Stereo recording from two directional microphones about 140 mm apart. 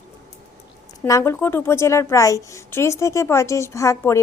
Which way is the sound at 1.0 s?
20° left (ahead or behind).